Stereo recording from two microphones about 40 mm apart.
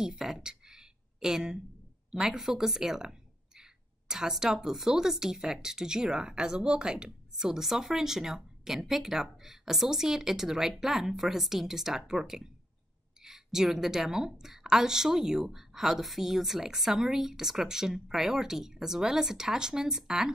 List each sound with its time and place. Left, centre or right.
0.0 s speech: centre
0.4 s a sound: centre
2.3 s speech: centre